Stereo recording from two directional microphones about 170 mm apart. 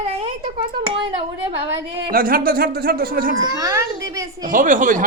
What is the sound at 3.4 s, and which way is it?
Speech, 20° right (ahead or behind).